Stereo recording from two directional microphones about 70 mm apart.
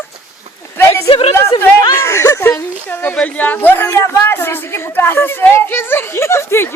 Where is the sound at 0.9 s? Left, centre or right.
Left.